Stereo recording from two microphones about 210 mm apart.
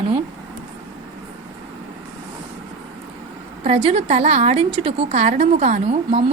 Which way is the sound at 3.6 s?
30° right (ahead or behind).